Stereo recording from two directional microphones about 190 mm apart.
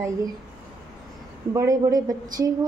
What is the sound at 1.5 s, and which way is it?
Speech, 20° right (ahead or behind).